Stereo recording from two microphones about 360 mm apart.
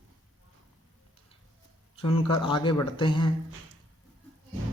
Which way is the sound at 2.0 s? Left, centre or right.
Centre.